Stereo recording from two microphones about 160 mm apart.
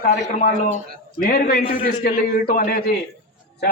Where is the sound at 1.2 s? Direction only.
75° left (ahead or behind).